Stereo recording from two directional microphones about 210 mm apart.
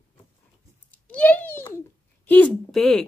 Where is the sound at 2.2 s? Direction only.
5° left (ahead or behind).